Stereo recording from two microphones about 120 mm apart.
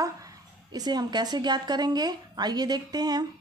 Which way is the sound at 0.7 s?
35° right (ahead or behind).